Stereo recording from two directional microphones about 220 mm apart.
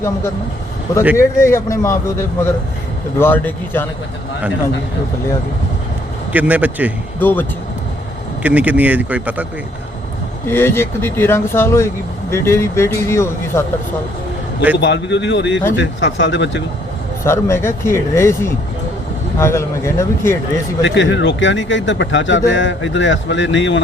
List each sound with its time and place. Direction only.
1.1 s speech: 10° left (ahead or behind)
6.3 s speech: 5° right (ahead or behind)
7.2 s speech: 10° left (ahead or behind)
8.4 s speech: 5° right (ahead or behind)
10.4 s speech: 10° left (ahead or behind)
14.8 s a man's voice: 55° left (ahead or behind)
17.2 s speech: 10° left (ahead or behind)
20.8 s a man's voice: 55° left (ahead or behind)